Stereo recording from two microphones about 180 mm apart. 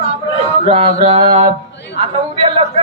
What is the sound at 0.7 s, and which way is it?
A man's voice, 35° right (ahead or behind).